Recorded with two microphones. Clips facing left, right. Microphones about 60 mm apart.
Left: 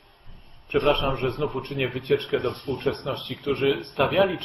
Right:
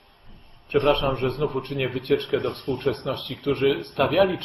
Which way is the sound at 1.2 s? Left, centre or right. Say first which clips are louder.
Right 2 dB; centre.